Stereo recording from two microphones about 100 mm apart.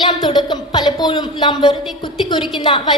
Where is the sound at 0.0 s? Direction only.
50° left (ahead or behind).